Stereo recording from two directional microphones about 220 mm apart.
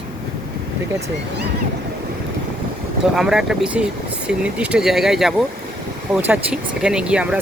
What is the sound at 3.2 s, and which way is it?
Speech, centre (ahead or behind).